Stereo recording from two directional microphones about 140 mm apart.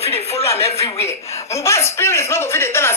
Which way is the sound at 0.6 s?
20° left (ahead or behind).